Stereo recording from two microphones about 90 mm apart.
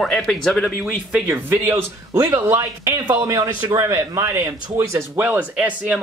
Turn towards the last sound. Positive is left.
turn(degrees=-15)  # may be behind; listen again after turning